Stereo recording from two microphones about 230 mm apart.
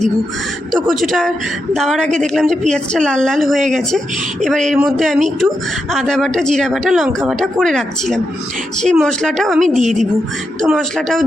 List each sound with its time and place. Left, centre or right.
0.7 s speech: centre
9.6 s a woman's voice: right
10.6 s speech: centre